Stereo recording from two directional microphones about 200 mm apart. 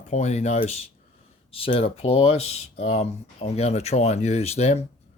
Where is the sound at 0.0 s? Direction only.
35° left (ahead or behind).